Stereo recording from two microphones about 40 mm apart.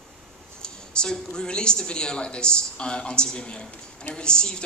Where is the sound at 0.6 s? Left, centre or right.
Left.